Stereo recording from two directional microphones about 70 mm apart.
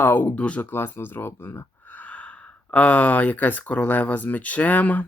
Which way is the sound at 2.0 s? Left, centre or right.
Left.